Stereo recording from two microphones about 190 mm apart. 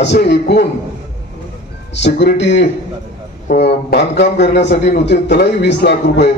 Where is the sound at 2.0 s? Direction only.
60° left (ahead or behind).